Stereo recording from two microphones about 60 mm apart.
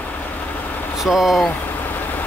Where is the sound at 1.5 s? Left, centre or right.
Left.